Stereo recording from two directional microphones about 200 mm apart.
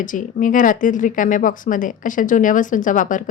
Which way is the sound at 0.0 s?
40° left (ahead or behind).